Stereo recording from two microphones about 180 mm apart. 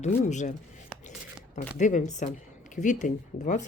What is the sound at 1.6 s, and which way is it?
Speech, 45° left (ahead or behind).